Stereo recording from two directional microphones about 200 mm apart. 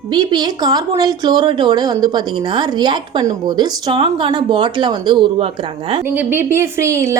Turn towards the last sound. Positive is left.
turn(degrees=-15)  # may be behind; listen again after turning